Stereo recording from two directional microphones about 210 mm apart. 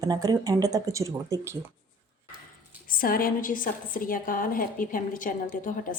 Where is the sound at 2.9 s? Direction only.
40° left (ahead or behind).